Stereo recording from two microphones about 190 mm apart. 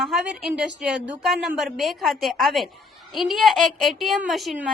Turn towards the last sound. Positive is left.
turn(degrees=0)  # may be behind; listen again after turning